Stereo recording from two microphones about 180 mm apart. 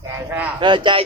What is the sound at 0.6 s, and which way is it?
Speech, 25° right (ahead or behind).